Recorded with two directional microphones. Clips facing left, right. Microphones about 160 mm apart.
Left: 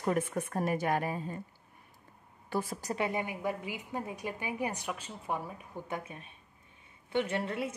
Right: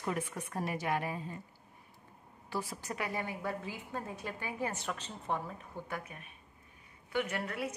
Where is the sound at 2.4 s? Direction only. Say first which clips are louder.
Left 4 dB; 50° left (ahead or behind).